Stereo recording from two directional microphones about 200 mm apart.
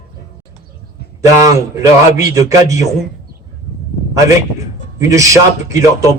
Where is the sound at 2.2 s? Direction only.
15° right (ahead or behind).